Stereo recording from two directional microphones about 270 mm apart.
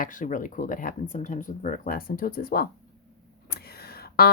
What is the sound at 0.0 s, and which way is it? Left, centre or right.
Speech, left.